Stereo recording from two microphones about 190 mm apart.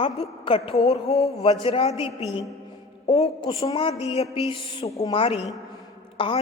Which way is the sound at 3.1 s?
25° left (ahead or behind).